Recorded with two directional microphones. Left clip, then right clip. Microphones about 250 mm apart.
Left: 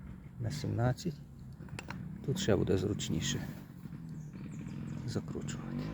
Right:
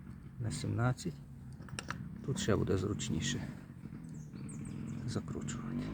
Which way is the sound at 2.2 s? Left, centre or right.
Centre.